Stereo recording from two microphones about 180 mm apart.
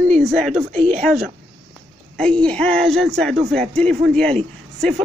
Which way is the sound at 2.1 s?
5° left (ahead or behind).